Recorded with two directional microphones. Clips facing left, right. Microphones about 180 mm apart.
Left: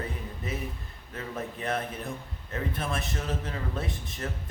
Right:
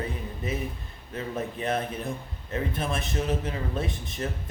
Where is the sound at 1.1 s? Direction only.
20° right (ahead or behind).